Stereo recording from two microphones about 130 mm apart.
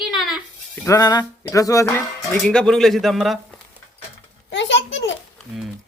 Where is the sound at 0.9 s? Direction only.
30° left (ahead or behind).